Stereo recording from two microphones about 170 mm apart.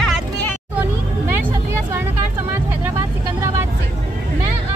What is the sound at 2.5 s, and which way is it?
Vehicle, 15° right (ahead or behind).